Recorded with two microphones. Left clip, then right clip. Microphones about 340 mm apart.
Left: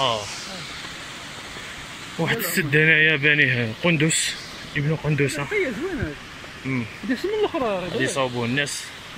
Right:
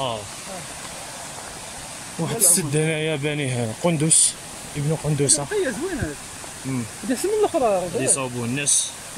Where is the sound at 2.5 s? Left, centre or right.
Centre.